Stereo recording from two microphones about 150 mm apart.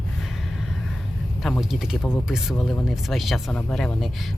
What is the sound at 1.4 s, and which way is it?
Speech, centre (ahead or behind).